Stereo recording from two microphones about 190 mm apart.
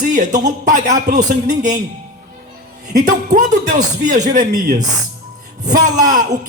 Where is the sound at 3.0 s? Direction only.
40° right (ahead or behind).